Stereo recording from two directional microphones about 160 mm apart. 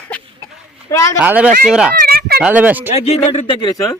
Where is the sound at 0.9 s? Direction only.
20° left (ahead or behind).